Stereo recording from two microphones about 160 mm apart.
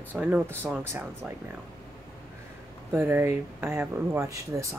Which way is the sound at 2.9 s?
15° right (ahead or behind).